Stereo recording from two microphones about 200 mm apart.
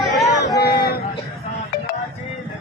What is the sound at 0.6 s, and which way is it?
Vehicle, 50° left (ahead or behind).